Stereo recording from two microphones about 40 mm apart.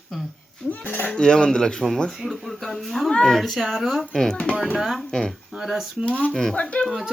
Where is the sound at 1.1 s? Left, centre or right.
Centre.